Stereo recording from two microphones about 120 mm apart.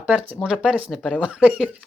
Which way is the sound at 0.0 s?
10° right (ahead or behind).